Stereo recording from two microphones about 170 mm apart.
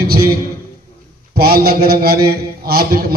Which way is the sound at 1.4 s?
65° right (ahead or behind).